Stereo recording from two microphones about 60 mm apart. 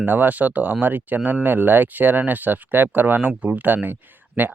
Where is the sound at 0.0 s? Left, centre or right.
Right.